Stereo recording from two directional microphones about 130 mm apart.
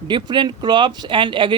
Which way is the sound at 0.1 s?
35° right (ahead or behind).